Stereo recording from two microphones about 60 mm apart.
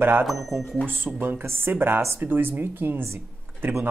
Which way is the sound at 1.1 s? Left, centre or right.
Right.